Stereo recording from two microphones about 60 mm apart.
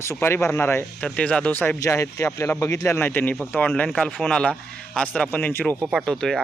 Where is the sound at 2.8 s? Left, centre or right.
Left.